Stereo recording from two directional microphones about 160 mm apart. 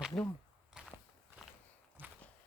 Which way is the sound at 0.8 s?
5° right (ahead or behind).